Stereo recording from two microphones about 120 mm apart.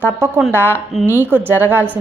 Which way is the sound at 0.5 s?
20° right (ahead or behind).